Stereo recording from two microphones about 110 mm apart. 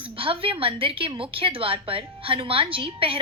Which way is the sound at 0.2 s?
55° right (ahead or behind).